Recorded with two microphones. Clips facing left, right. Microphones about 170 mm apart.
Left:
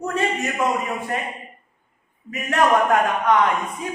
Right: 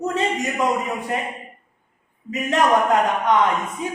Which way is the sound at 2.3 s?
20° right (ahead or behind).